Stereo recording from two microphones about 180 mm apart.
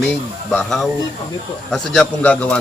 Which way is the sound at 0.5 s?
Centre (ahead or behind).